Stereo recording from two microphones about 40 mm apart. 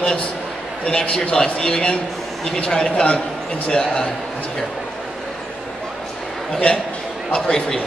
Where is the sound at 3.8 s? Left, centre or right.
Left.